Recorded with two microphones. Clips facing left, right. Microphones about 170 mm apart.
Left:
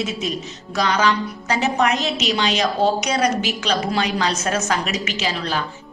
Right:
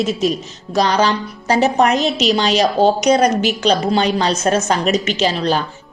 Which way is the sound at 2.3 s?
35° right (ahead or behind).